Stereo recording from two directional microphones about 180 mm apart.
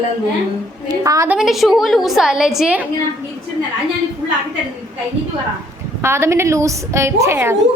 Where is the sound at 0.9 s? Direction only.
20° right (ahead or behind).